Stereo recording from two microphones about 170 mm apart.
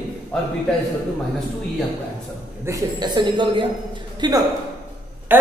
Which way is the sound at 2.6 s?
20° right (ahead or behind).